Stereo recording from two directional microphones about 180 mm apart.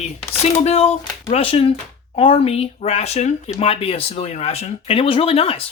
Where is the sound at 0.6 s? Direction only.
35° left (ahead or behind).